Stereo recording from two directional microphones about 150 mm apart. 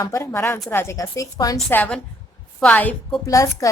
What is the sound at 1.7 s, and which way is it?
A woman's voice, 10° left (ahead or behind).